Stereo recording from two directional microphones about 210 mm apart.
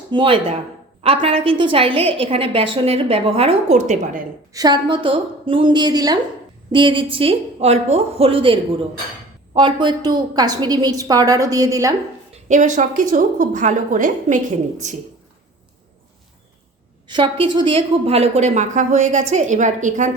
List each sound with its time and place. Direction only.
0.1 s a woman's voice: 25° right (ahead or behind)
4.5 s a woman's voice: 20° right (ahead or behind)
12.5 s a woman's voice: 35° right (ahead or behind)
17.1 s a woman's voice: 25° right (ahead or behind)